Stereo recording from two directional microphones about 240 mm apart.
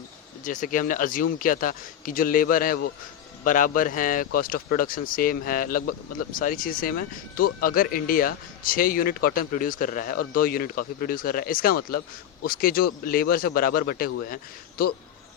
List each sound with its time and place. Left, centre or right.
0.4 s speech: left